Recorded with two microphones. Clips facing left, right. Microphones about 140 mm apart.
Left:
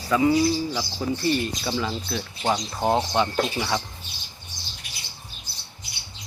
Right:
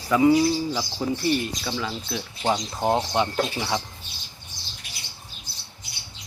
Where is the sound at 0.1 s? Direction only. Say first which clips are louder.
Right 2 dB; 15° right (ahead or behind).